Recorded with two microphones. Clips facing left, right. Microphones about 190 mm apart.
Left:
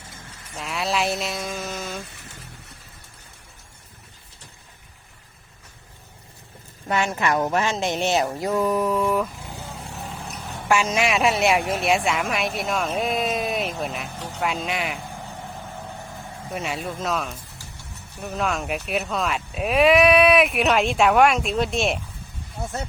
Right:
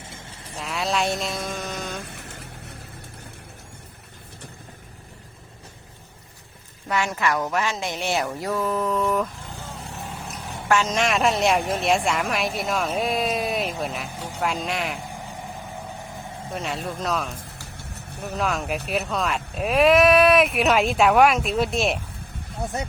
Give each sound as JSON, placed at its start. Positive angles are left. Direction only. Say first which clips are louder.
{"t": 0.1, "sound": "a sound", "louder": "left 2 dB", "side_deg": -30}
{"t": 0.6, "sound": "a sound", "louder": "even", "side_deg": 0}
{"t": 2.0, "sound": "music", "louder": "right 2 dB", "side_deg": -65}
{"t": 6.8, "sound": "speech", "louder": "left 1 dB", "side_deg": 25}
{"t": 10.7, "sound": "speech", "louder": "even", "side_deg": 10}
{"t": 16.6, "sound": "speech", "louder": "left 1 dB", "side_deg": 0}
{"t": 22.6, "sound": "speech", "louder": "right 2 dB", "side_deg": -15}